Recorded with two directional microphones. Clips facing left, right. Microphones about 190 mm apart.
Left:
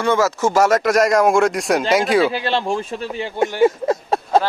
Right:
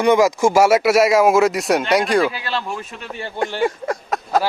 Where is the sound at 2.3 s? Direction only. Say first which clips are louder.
Left 5 dB; 25° left (ahead or behind).